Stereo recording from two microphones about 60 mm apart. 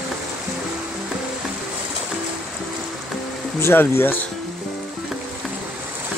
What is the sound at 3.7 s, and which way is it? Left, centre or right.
Speech, left.